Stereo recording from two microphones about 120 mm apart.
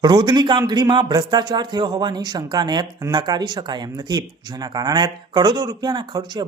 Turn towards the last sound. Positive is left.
turn(degrees=-35)  # may be behind; listen again after turning